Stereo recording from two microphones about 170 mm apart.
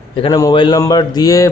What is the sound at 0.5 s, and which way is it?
Speech, 25° left (ahead or behind).